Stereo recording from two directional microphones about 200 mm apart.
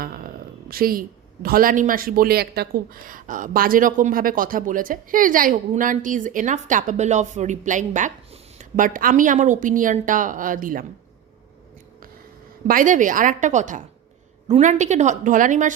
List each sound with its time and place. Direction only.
0.0 s a sound: 45° right (ahead or behind)
0.7 s speech: 45° right (ahead or behind)
12.6 s speech: 40° right (ahead or behind)